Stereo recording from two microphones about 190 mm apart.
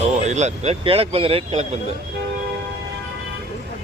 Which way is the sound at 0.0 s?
35° right (ahead or behind).